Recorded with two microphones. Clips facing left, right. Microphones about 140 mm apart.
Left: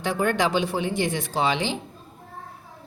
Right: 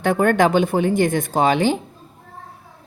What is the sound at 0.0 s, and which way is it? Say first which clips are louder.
A woman's voice: right 7 dB; 55° right (ahead or behind).